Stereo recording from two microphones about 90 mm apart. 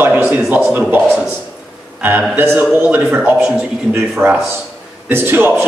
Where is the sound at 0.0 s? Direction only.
20° right (ahead or behind).